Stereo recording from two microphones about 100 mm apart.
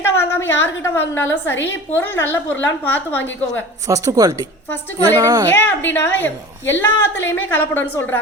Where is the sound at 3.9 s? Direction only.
35° right (ahead or behind).